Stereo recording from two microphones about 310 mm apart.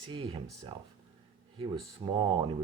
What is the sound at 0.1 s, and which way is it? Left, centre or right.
Speech, centre.